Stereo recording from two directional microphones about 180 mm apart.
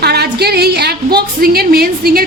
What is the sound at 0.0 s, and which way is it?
A woman's voice, 65° right (ahead or behind).